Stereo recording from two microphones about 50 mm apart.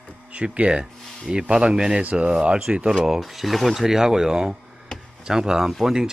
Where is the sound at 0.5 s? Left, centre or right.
Right.